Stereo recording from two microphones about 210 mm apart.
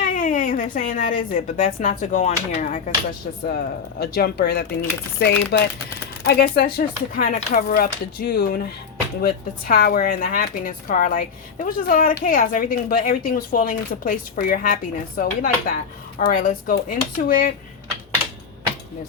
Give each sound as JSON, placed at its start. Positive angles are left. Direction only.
{"t": 0.0, "sound": "a woman's voice", "side_deg": 40}
{"t": 4.0, "sound": "speech", "side_deg": 50}